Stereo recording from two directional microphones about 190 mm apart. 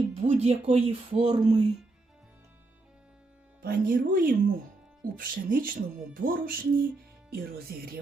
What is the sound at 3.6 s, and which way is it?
A woman's voice, 50° right (ahead or behind).